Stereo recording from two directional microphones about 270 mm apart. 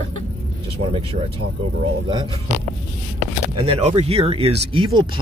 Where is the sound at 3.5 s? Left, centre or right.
Centre.